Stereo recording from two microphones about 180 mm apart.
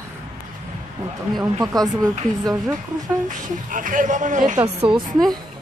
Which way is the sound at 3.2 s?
45° right (ahead or behind).